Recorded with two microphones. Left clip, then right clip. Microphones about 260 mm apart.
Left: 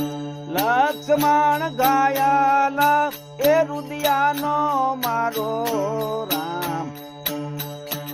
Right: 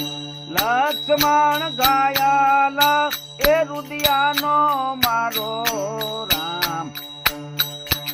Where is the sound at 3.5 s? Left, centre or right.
Centre.